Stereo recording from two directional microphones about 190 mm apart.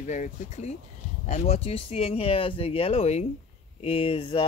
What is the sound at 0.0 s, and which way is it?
Speech, 40° left (ahead or behind).